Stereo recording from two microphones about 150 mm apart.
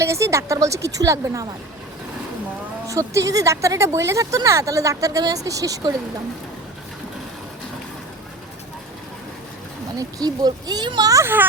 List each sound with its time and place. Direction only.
0.0 s speech: 20° right (ahead or behind)
2.8 s speech: 20° right (ahead or behind)
10.0 s speech: 25° right (ahead or behind)